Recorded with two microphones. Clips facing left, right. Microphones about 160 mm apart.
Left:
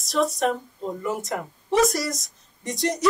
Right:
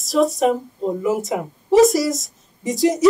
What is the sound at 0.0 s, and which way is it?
Speech, centre (ahead or behind).